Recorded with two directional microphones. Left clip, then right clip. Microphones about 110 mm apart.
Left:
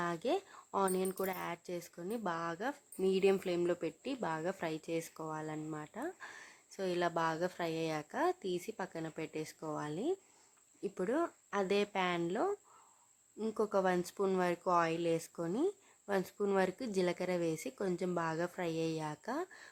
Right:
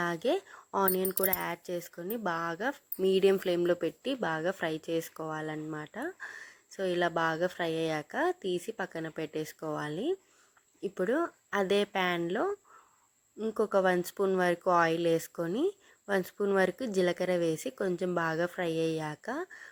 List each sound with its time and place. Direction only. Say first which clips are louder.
0.0 s speech: right 5 dB; 25° right (ahead or behind)